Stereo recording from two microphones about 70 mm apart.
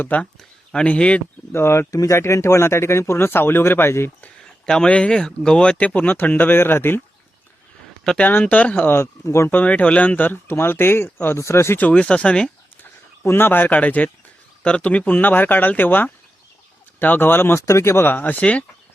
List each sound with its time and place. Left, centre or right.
0.0 s speech: left
1.5 s speech: left
2.1 s speech: left
4.6 s speech: centre; by 7.0 s left
8.2 s speech: left
8.9 s speech: left
9.5 s speech: left
11.8 s speech: centre
13.2 s speech: left
17.6 s speech: left